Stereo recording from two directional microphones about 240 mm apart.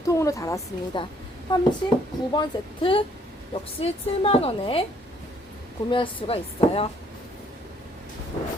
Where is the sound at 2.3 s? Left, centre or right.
Centre.